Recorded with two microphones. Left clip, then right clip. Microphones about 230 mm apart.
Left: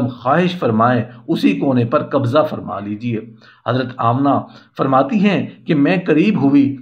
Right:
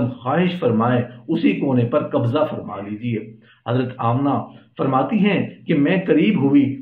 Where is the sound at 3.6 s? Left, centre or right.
Left.